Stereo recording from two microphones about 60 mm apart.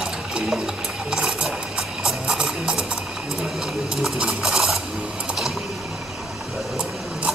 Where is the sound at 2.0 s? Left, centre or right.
Centre.